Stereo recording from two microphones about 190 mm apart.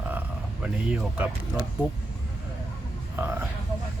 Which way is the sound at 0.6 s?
5° right (ahead or behind).